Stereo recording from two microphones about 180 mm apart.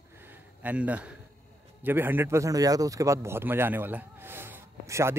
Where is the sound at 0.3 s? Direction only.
10° right (ahead or behind).